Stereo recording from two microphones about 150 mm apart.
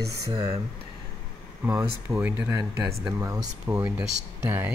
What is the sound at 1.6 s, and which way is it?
Speech, 10° right (ahead or behind).